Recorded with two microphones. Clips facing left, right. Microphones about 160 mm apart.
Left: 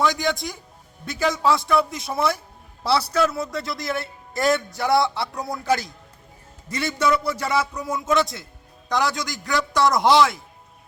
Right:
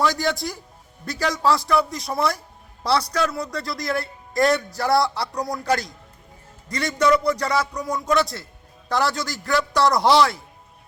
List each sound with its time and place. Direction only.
0.0 s a man's voice: centre (ahead or behind)